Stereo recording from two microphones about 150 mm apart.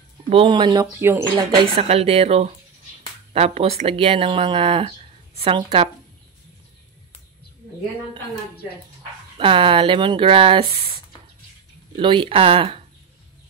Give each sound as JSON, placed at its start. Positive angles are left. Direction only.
{"t": 0.3, "sound": "speech", "side_deg": -35}
{"t": 1.3, "sound": "speech", "side_deg": -35}
{"t": 9.4, "sound": "speech", "side_deg": -35}
{"t": 12.0, "sound": "speech", "side_deg": -35}